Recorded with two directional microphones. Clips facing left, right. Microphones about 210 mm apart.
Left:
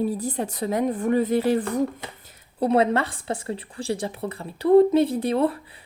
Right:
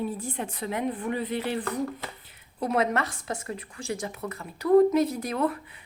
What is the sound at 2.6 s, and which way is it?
Speech, 30° left (ahead or behind).